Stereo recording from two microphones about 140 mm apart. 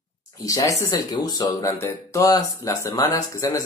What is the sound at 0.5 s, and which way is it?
Speech, 25° left (ahead or behind).